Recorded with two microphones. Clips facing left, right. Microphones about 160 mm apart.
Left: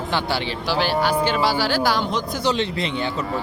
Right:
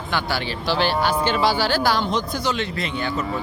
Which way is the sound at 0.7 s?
10° left (ahead or behind).